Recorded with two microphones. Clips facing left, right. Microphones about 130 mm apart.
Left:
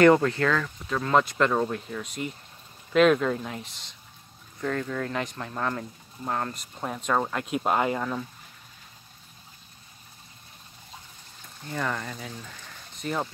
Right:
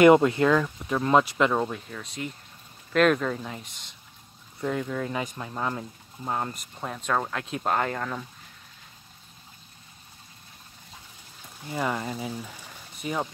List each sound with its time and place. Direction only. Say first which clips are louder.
0.0 s speech: right 2 dB; 15° right (ahead or behind); by 3.8 s centre (ahead or behind)
4.6 s speech: right 1 dB; 10° right (ahead or behind)
6.5 s speech: left 2 dB; centre (ahead or behind)
11.6 s speech: right 2 dB; 10° right (ahead or behind)